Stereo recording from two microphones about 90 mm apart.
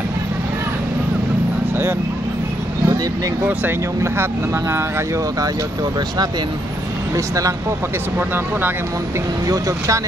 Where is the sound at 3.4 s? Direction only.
25° right (ahead or behind).